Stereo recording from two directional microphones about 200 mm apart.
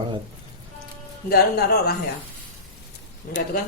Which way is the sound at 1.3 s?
50° left (ahead or behind).